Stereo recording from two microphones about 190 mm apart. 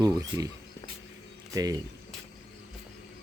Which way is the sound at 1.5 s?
20° right (ahead or behind).